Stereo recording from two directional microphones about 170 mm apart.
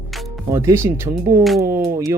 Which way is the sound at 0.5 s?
15° right (ahead or behind).